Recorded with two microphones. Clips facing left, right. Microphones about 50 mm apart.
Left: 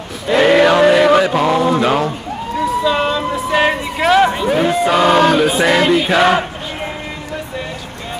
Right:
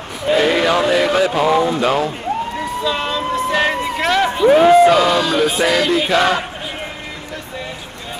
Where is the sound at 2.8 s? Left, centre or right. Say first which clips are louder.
Left 4 dB; centre.